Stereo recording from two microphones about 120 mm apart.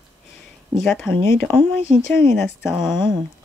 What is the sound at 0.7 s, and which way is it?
Speech, centre (ahead or behind).